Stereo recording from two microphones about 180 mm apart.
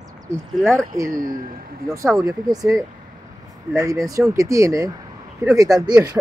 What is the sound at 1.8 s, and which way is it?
Speech, 15° right (ahead or behind).